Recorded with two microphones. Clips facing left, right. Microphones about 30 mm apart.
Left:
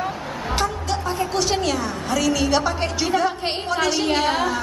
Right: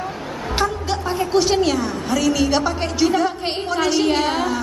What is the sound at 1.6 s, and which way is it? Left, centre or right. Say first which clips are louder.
A woman's voice: right 4 dB; centre.